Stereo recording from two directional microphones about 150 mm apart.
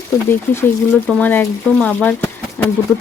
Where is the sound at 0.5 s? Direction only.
10° left (ahead or behind).